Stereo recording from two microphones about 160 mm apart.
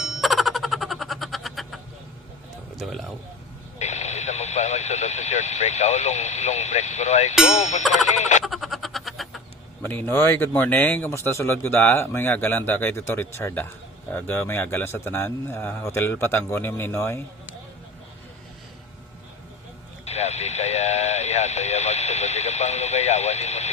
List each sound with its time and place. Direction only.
0.0 s a sound: centre (ahead or behind)
2.7 s speech: centre (ahead or behind)
3.8 s speech: 45° left (ahead or behind)
8.4 s frog: centre (ahead or behind)
9.8 s speech: 15° left (ahead or behind)
20.1 s radio: 45° left (ahead or behind)